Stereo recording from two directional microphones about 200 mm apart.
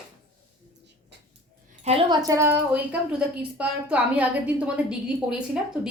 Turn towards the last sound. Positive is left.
turn(degrees=-5)  # may be behind; listen again after turning